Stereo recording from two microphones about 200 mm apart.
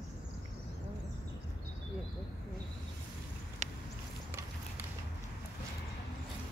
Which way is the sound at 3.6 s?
35° right (ahead or behind).